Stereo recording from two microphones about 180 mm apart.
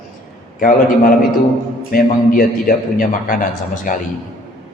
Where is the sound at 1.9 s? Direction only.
50° left (ahead or behind).